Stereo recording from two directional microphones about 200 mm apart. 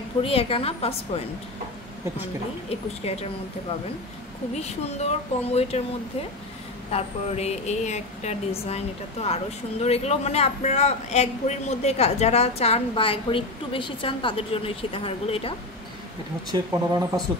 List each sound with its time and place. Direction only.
0.2 s a woman's voice: 30° left (ahead or behind)
2.7 s a woman's voice: 30° left (ahead or behind)
4.6 s a woman's voice: 35° left (ahead or behind)
6.9 s a woman's voice: 30° left (ahead or behind)
16.5 s speech: 15° right (ahead or behind)